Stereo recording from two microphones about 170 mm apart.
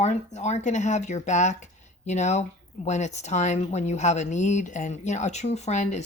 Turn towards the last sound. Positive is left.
turn(degrees=40)  # may be behind; listen again after turning